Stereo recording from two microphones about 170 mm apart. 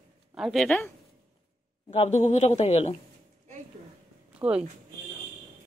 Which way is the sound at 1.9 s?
40° left (ahead or behind).